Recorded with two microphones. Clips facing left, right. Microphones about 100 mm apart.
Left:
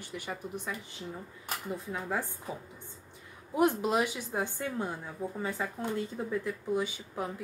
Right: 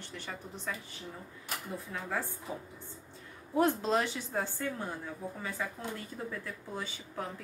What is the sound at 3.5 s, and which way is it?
Speech, 15° left (ahead or behind).